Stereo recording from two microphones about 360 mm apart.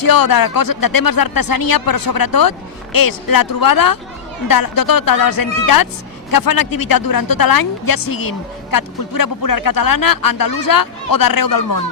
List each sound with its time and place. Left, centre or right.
0.0 s speech: left